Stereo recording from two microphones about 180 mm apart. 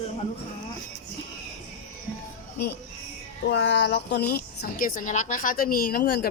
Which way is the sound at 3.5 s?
85° left.